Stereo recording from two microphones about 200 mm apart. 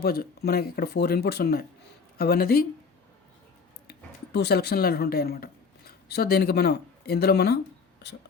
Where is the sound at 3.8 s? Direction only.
55° left (ahead or behind).